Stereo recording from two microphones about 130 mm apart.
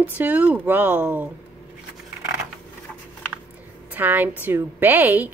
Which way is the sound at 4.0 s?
15° right (ahead or behind).